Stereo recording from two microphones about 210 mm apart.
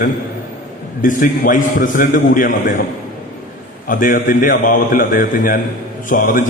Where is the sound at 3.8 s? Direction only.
40° left (ahead or behind).